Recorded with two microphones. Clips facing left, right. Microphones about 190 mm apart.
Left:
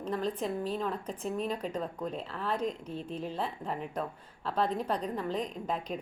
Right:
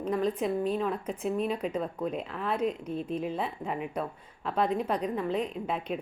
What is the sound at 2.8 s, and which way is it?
Speech, 30° left (ahead or behind).